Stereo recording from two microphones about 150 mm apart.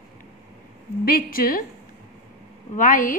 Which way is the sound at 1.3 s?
70° left (ahead or behind).